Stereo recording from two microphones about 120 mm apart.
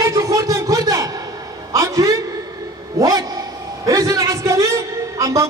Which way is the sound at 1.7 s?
30° right (ahead or behind).